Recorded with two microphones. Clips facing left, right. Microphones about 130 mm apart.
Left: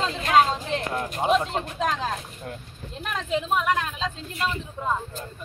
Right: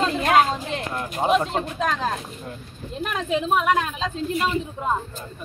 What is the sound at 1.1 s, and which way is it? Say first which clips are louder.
Speech: right 2 dB; 10° right (ahead or behind).